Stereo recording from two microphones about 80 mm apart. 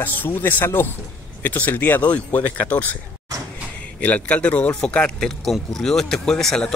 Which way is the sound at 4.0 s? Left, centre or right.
Centre.